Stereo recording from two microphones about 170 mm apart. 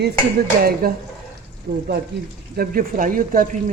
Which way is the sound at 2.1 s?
80° right.